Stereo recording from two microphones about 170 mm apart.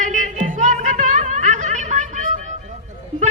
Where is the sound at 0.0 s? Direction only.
45° right (ahead or behind).